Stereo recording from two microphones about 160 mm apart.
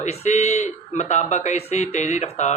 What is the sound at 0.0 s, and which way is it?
Speech, 45° left (ahead or behind).